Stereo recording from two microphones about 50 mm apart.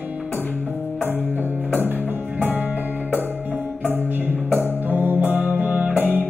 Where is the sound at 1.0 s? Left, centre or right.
Right.